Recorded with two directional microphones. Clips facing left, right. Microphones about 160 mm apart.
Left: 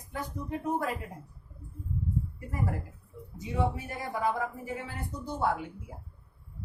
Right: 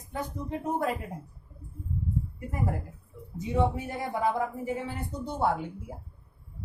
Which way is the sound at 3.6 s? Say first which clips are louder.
Right 3 dB; 25° right (ahead or behind).